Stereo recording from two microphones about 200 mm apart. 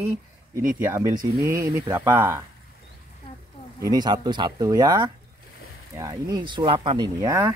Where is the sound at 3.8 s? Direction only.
20° right (ahead or behind).